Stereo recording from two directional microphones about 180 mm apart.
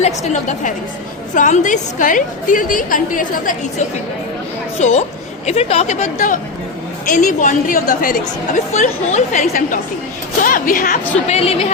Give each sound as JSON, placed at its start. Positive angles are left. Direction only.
{"t": 0.0, "sound": "a woman's voice", "side_deg": 40}
{"t": 11.3, "sound": "speech", "side_deg": 35}